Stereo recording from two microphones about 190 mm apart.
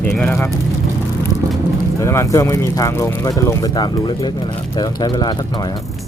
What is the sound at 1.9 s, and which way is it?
Speech, 15° left (ahead or behind).